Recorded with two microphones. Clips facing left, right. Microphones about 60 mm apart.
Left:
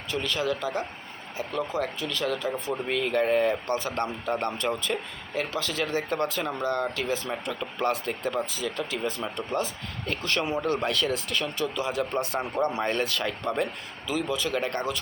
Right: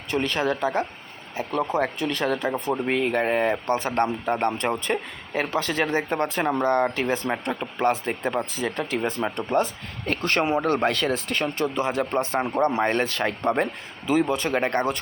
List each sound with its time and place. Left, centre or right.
0.1 s speech: right
2.8 s speech: right
7.5 s speech: right